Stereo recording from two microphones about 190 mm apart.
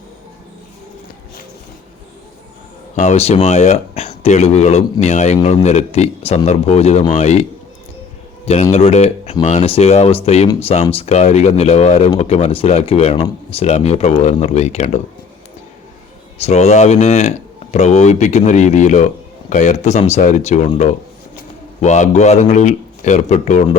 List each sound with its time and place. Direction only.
2.9 s speech: 40° left (ahead or behind)
8.7 s speech: 35° left (ahead or behind)
16.4 s speech: 35° left (ahead or behind)